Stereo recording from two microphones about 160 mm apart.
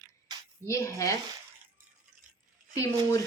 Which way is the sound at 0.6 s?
20° left (ahead or behind).